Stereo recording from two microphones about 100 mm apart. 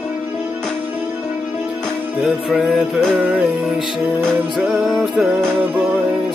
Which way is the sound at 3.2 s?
15° right (ahead or behind).